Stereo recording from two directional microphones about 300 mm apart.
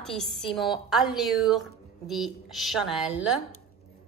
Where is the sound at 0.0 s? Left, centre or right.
Centre.